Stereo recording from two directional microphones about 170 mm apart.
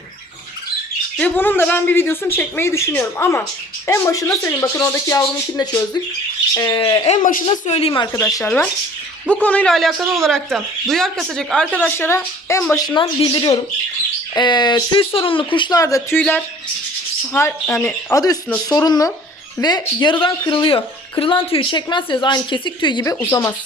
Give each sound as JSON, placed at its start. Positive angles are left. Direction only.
{"t": 1.1, "sound": "speech", "side_deg": 10}
{"t": 7.2, "sound": "a woman's voice", "side_deg": 50}
{"t": 8.1, "sound": "speech", "side_deg": 20}
{"t": 8.4, "sound": "speech", "side_deg": 5}
{"t": 23.1, "sound": "speech", "side_deg": 15}